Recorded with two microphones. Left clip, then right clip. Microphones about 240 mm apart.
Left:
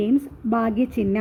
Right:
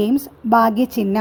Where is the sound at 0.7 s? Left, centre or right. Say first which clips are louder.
Right 4 dB; right.